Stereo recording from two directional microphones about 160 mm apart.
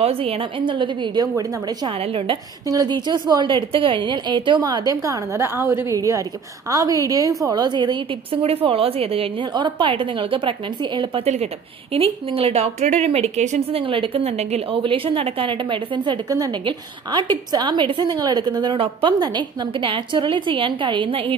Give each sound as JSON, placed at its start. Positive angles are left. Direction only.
{"t": 0.0, "sound": "a woman's voice", "side_deg": -40}
{"t": 2.7, "sound": "a woman's voice", "side_deg": -25}